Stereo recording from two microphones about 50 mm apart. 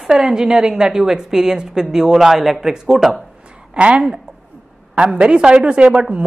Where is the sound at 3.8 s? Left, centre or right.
Right.